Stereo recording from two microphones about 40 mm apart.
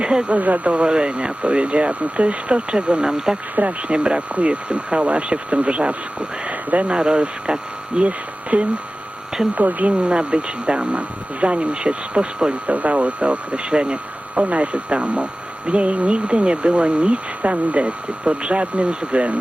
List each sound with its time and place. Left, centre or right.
0.0 s speech: centre
0.3 s speech: right
0.7 s speech: right
3.5 s speech: right
3.9 s speech: right
6.9 s speech: right
10.0 s speech: right
12.6 s speech: right